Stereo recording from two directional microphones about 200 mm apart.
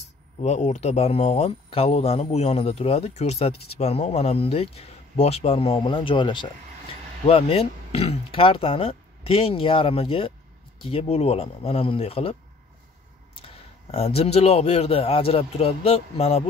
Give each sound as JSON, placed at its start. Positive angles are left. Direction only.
{"t": 0.4, "sound": "speech", "side_deg": 35}
{"t": 13.9, "sound": "speech", "side_deg": 30}